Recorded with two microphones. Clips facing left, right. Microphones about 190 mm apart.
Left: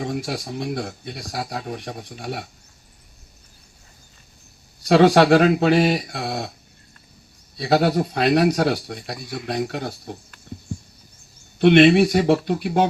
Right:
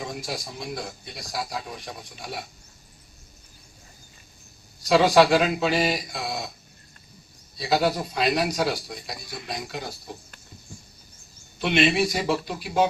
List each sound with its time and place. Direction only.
0.0 s speech: 65° left (ahead or behind)
4.9 s speech: 65° left (ahead or behind)
7.5 s speech: 65° left (ahead or behind)
11.6 s speech: 60° left (ahead or behind)